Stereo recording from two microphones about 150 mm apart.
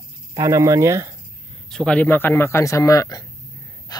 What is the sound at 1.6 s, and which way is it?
Speech, 5° left (ahead or behind).